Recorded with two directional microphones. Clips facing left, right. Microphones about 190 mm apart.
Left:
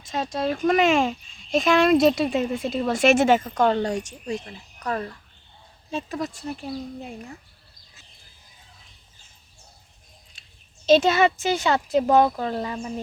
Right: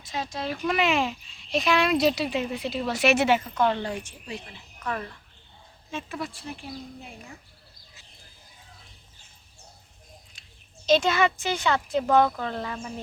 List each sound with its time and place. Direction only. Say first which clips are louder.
0.1 s speech: left 6 dB; 45° left (ahead or behind)
11.0 s speech: left 4 dB; 20° left (ahead or behind)